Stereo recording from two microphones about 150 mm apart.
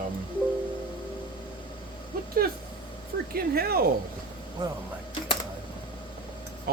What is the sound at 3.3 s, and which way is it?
Speech, 90° right.